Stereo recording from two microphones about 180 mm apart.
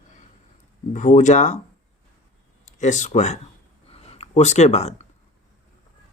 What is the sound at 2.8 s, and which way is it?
Speech, 40° left (ahead or behind).